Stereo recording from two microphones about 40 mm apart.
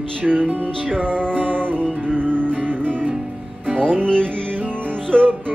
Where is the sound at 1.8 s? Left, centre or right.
Left.